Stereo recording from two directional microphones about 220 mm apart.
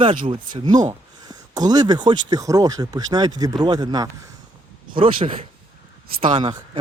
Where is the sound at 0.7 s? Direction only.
35° right (ahead or behind).